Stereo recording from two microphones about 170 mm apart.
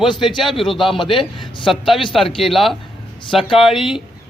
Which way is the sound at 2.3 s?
30° left (ahead or behind).